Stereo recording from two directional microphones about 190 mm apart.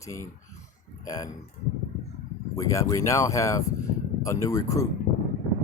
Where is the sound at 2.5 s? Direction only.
15° left (ahead or behind).